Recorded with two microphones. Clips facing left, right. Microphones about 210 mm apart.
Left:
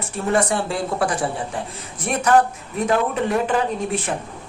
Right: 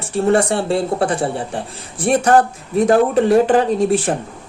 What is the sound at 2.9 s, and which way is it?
Speech, 45° right (ahead or behind).